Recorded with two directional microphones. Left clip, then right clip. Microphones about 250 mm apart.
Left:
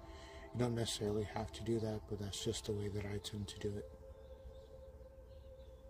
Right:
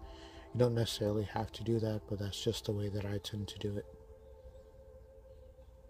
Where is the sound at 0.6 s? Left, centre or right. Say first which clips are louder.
Right 7 dB; right.